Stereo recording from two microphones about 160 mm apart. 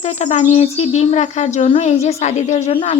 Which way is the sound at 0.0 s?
45° left (ahead or behind).